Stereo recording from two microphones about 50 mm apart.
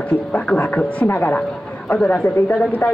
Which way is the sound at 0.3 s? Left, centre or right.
Left.